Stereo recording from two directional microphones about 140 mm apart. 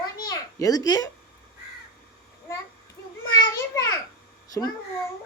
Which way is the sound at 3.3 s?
25° left (ahead or behind).